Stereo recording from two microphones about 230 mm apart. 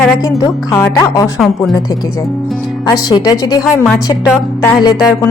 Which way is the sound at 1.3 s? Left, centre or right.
Centre.